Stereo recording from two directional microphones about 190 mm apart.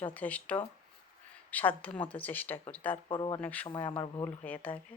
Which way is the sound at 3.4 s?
5° left (ahead or behind).